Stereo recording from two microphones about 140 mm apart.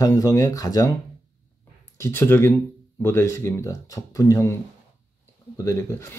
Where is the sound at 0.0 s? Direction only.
25° left (ahead or behind).